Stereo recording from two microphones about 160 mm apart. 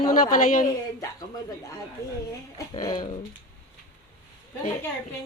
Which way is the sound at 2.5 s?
25° left (ahead or behind).